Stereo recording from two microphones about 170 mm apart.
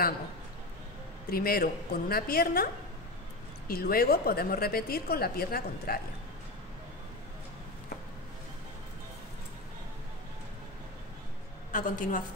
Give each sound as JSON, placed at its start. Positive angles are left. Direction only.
{"t": 1.3, "sound": "a woman's voice", "side_deg": 60}
{"t": 11.7, "sound": "a woman's voice", "side_deg": 55}